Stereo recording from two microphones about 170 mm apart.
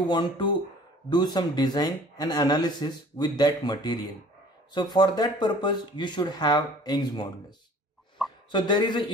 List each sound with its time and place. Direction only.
0.1 s speech: 25° left (ahead or behind)